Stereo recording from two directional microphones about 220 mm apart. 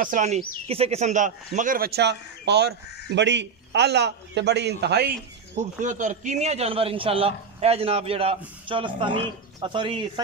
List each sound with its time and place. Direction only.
0.0 s speech: 35° right (ahead or behind)
5.6 s a man's voice: 35° right (ahead or behind)